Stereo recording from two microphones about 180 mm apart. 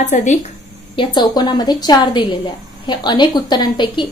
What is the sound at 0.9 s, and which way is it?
A woman's voice, 25° left (ahead or behind).